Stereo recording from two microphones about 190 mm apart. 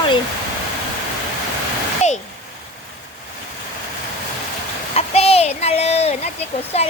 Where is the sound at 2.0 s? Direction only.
35° left (ahead or behind).